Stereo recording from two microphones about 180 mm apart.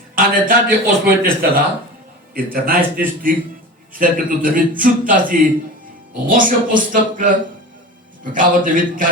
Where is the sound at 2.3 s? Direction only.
55° right (ahead or behind).